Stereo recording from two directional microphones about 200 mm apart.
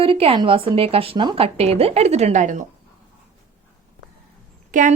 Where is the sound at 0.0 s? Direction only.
30° right (ahead or behind).